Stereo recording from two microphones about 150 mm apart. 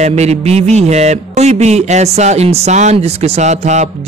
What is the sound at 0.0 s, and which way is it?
Speech, 45° right (ahead or behind).